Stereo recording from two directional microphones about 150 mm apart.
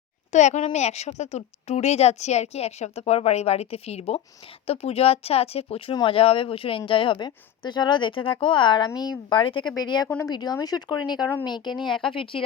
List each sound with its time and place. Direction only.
0.3 s a woman's voice: 50° left (ahead or behind); by 11.7 s 30° left (ahead or behind)
11.9 s speech: centre (ahead or behind)
12.1 s speech: 35° left (ahead or behind)